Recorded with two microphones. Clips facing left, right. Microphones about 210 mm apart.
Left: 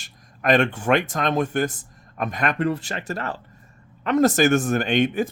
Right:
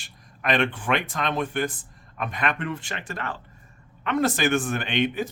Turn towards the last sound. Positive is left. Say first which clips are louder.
# left 5 dB
turn(degrees=45)  # may be behind; listen again after turning